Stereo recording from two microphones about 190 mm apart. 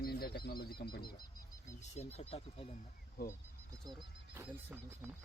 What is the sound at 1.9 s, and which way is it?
Speech, 35° left (ahead or behind).